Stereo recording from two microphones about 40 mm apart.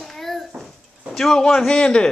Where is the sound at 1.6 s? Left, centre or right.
Centre.